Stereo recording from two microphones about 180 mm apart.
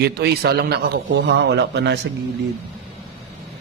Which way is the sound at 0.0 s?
65° right (ahead or behind).